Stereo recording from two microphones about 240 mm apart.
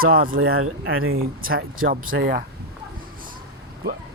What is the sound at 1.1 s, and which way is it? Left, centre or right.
Speech, right.